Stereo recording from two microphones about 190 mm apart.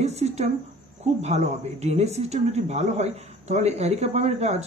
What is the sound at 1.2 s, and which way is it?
Speech, 35° right (ahead or behind).